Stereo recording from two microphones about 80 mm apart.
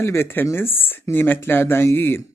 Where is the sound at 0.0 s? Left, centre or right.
Left.